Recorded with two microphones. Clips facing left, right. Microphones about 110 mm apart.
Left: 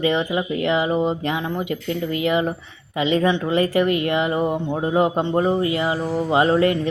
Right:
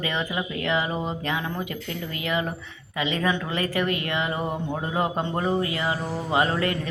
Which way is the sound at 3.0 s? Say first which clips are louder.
Left 6 dB; 25° left (ahead or behind).